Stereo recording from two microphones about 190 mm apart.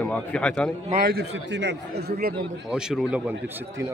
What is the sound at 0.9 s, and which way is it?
A man's voice, 55° right (ahead or behind).